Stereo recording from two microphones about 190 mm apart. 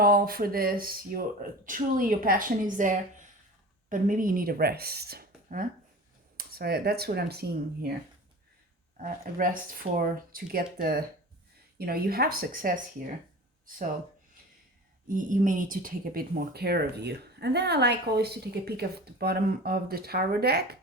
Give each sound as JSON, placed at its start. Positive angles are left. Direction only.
{"t": 0.0, "sound": "speech", "side_deg": -55}
{"t": 9.0, "sound": "speech", "side_deg": -50}
{"t": 15.0, "sound": "speech", "side_deg": -45}